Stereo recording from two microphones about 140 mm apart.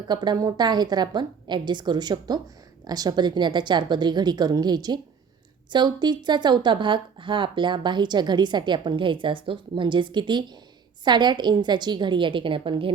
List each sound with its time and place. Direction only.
0.1 s speech: 30° right (ahead or behind)